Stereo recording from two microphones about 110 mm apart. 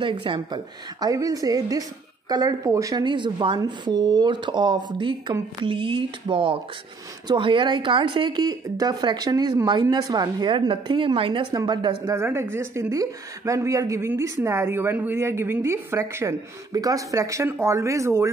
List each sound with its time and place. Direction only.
0.0 s speech: 50° right (ahead or behind)
1.0 s a woman's voice: 30° right (ahead or behind)
3.0 s speech: 45° right (ahead or behind)
12.1 s a woman's voice: 25° right (ahead or behind)